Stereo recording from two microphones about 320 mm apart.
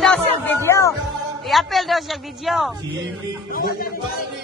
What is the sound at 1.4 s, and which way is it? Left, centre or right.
Speech, centre.